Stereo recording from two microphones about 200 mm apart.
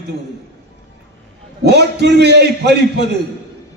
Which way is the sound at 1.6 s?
55° right (ahead or behind).